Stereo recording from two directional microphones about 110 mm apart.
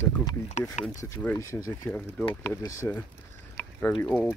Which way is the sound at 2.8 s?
25° left (ahead or behind).